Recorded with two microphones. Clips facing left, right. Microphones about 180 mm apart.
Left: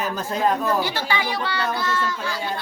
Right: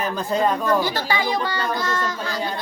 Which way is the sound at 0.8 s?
40° right (ahead or behind).